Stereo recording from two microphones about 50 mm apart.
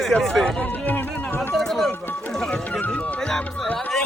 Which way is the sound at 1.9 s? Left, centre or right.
Left.